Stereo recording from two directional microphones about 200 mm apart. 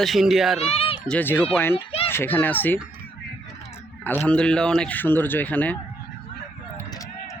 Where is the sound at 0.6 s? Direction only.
30° left (ahead or behind).